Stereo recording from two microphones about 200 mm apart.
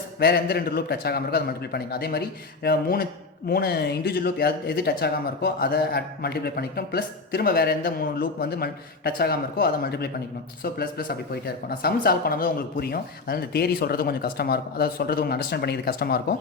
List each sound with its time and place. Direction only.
0.2 s speech: 50° left (ahead or behind)